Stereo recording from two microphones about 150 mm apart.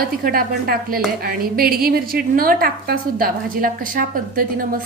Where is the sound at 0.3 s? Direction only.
80° right.